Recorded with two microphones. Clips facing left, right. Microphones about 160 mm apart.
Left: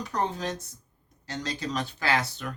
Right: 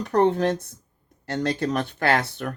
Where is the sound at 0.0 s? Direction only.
60° right (ahead or behind).